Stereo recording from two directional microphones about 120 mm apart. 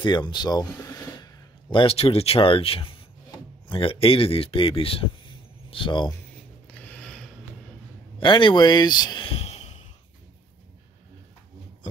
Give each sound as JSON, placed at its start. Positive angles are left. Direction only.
{"t": 0.0, "sound": "speech", "side_deg": 40}
{"t": 6.7, "sound": "mechanisms", "side_deg": 10}
{"t": 8.2, "sound": "speech", "side_deg": 45}
{"t": 9.3, "sound": "sigh", "side_deg": 60}